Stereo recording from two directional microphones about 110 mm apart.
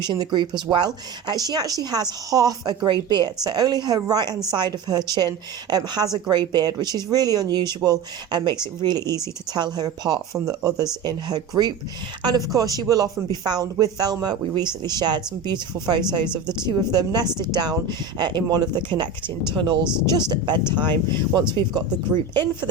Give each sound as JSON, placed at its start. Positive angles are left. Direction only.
{"t": 0.0, "sound": "speech", "side_deg": -40}